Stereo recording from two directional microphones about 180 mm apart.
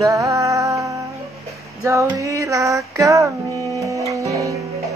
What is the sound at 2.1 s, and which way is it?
Speech, 20° right (ahead or behind).